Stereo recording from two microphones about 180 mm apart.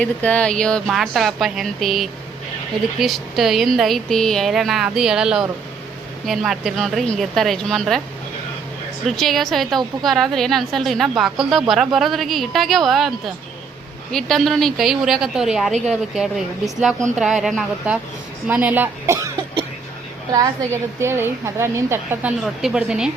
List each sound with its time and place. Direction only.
0.0 s a woman's voice: 5° left (ahead or behind)
9.0 s a woman's voice: centre (ahead or behind); by 19.5 s 15° right (ahead or behind)
21.0 s a woman's voice: 15° right (ahead or behind)